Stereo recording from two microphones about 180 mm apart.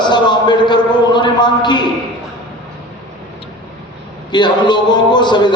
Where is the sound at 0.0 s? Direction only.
25° left (ahead or behind).